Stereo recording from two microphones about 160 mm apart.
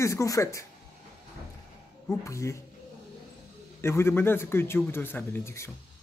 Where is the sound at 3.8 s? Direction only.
15° left (ahead or behind).